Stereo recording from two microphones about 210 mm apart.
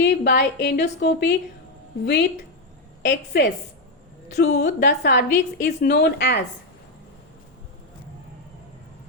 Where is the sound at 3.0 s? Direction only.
55° left (ahead or behind).